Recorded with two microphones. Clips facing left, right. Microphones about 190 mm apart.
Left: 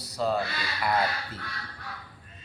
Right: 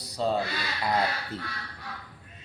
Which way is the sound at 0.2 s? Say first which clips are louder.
Even; 25° right (ahead or behind).